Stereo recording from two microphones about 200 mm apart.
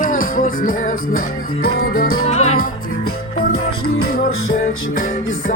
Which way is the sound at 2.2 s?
35° left (ahead or behind).